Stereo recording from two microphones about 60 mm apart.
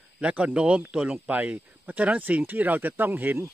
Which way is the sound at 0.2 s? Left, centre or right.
Right.